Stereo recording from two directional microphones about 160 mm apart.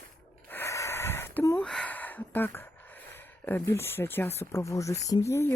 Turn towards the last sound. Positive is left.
turn(degrees=15)  # may be behind; listen again after turning